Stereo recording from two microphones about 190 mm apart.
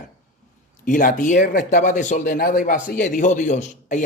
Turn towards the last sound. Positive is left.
turn(degrees=40)  # may be behind; listen again after turning